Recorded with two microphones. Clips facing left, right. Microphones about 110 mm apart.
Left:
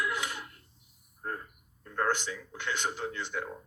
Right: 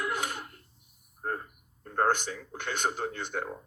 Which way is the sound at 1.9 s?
45° right (ahead or behind).